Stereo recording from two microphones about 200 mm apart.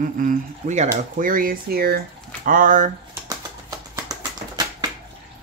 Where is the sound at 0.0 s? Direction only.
40° right (ahead or behind).